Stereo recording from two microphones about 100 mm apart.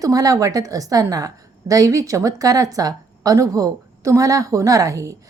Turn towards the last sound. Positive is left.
turn(degrees=-35)  # may be behind; listen again after turning